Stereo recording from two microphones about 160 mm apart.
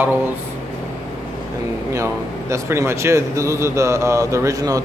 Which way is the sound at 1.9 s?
20° right (ahead or behind).